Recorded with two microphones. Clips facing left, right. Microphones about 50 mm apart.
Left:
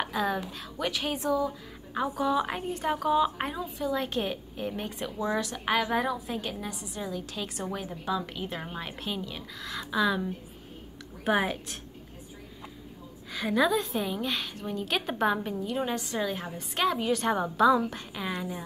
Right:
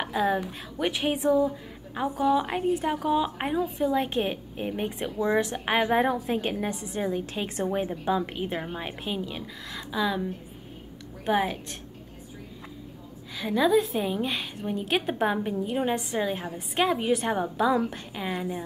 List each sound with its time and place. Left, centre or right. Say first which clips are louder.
0.0 s a sound: right 3 dB; centre
0.5 s a woman's voice: right 3 dB; right
3.5 s a woman's voice: right 6 dB; right; by 10.2 s centre
11.2 s a woman's voice: right 1 dB; centre
13.3 s a woman's voice: right 3 dB; centre